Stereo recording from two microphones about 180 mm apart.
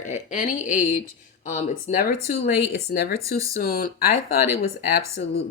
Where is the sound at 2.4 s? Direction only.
65° left (ahead or behind).